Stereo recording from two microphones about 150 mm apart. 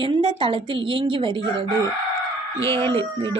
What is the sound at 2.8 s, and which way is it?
Speech, 20° left (ahead or behind).